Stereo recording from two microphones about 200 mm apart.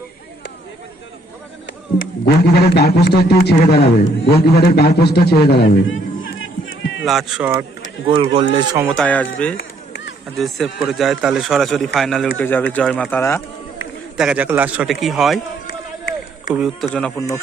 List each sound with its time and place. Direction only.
2.0 s a man's voice: 55° left (ahead or behind)
5.7 s a sound: 70° left (ahead or behind)
7.0 s a man's voice: centre (ahead or behind)
8.0 s speech: 25° right (ahead or behind)
8.5 s speech: 15° right (ahead or behind)
9.0 s speech: 5° left (ahead or behind)
9.6 s chop: 60° left (ahead or behind)
10.3 s a man's voice: centre (ahead or behind)
14.2 s a man's voice: 5° right (ahead or behind)
16.6 s a man's voice: centre (ahead or behind)
17.2 s speech: 15° left (ahead or behind)